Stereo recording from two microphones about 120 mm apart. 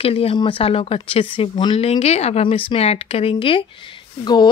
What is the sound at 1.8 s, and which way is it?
Speech, 60° left (ahead or behind).